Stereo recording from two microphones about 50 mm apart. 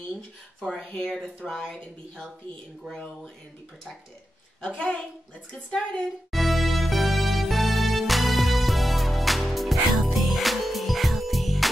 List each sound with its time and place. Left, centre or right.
0.6 s speech: centre
4.6 s a woman's voice: centre
6.3 s music: centre